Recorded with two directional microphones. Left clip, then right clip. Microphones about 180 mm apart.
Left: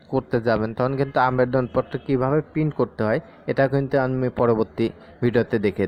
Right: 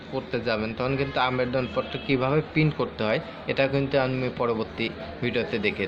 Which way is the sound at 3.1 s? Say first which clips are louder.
Left 3 dB; 55° left (ahead or behind).